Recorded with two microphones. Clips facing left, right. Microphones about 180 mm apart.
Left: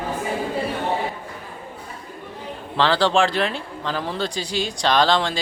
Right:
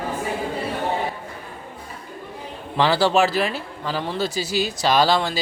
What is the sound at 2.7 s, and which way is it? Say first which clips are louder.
Speech: right 1 dB; 10° right (ahead or behind).